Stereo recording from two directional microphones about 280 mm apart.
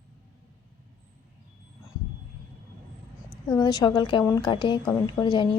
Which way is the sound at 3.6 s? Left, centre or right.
Centre.